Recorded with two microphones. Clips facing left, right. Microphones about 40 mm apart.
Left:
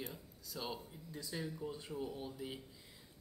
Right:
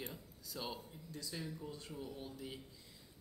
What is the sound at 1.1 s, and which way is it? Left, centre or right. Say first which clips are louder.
Mantra: left 2 dB; centre.